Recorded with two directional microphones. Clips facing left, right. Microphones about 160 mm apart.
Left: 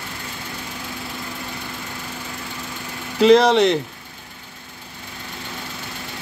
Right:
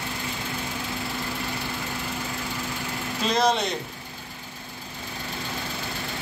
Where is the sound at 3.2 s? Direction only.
90° left.